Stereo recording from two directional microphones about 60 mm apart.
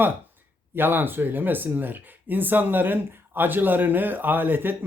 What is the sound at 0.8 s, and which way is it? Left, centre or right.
Speech, right.